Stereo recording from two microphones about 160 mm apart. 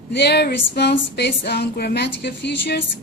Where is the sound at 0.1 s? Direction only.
90° left.